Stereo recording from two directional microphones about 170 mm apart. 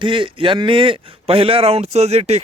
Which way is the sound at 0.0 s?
30° right (ahead or behind).